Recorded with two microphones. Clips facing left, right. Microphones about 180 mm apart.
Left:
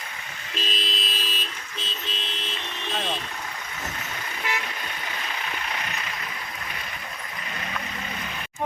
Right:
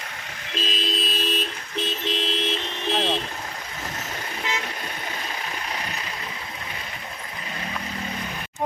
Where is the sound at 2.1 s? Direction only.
75° right (ahead or behind).